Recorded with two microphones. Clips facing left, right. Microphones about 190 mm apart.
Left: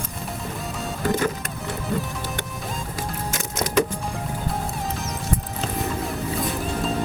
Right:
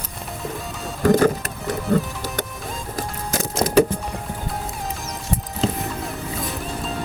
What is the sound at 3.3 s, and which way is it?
Music, 35° right (ahead or behind).